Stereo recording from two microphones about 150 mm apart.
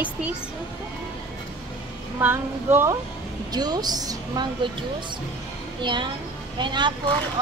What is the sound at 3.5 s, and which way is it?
A woman's voice, 25° right (ahead or behind).